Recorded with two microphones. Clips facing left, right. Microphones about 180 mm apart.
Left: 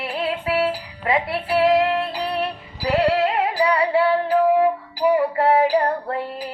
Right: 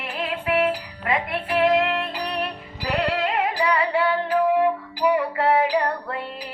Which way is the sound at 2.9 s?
30° left (ahead or behind).